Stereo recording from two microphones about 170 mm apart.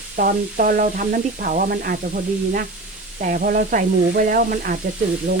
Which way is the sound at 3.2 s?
55° right (ahead or behind).